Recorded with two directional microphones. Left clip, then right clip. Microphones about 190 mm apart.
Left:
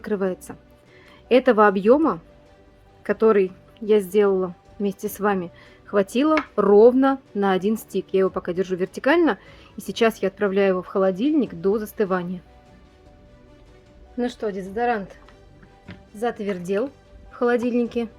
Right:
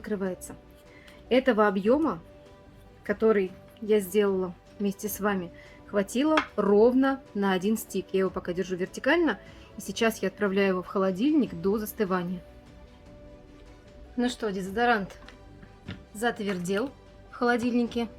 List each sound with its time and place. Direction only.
0.0 s a woman's voice: 55° left (ahead or behind)
14.2 s a woman's voice: 20° left (ahead or behind)
16.2 s speech: 25° left (ahead or behind)